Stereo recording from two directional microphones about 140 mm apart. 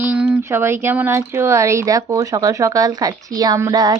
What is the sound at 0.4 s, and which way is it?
A woman's voice, 15° right (ahead or behind).